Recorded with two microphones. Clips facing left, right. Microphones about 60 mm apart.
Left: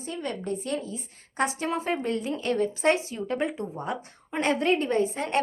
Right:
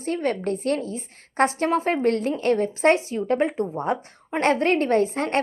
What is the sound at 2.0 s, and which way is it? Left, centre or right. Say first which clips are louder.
Speech: right 7 dB; right.